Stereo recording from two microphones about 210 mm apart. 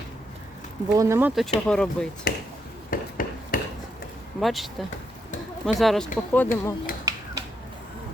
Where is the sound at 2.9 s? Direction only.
40° left (ahead or behind).